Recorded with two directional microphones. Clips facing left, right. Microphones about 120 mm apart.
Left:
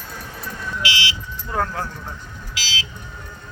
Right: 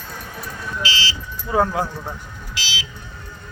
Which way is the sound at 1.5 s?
15° right (ahead or behind).